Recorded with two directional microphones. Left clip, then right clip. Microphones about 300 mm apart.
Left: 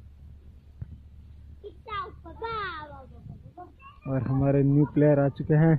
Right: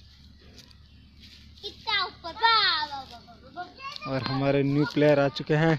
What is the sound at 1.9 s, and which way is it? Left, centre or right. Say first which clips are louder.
Children playing: right 7 dB; right.